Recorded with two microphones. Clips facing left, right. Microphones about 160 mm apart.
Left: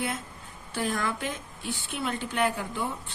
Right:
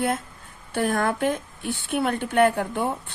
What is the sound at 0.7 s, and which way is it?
A woman's voice, 55° right (ahead or behind).